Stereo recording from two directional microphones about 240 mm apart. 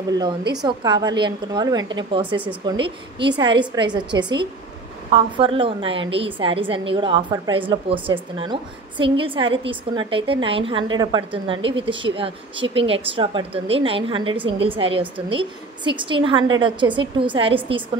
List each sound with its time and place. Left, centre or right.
0.2 s a woman's voice: centre